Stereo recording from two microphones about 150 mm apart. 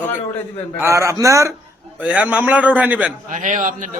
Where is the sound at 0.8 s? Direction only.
20° right (ahead or behind).